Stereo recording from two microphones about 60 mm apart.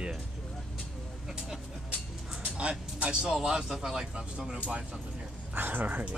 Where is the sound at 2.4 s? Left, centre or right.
Centre.